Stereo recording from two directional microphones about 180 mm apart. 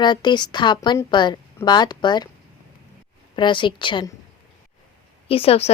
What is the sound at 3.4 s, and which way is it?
Speech, 25° left (ahead or behind).